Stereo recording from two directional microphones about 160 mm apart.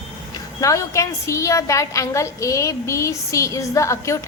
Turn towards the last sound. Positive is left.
turn(degrees=15)  # may be behind; listen again after turning